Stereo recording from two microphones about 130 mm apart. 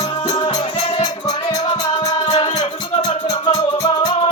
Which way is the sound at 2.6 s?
55° left (ahead or behind).